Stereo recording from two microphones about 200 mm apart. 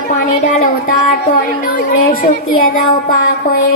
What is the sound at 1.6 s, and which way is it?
Speech, 45° left (ahead or behind).